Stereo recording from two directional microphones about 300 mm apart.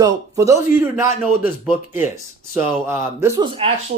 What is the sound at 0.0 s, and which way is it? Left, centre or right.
Speech, centre.